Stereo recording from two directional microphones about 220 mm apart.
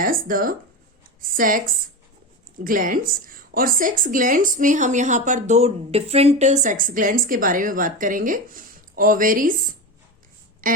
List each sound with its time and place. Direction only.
0.0 s a woman's voice: 40° right (ahead or behind)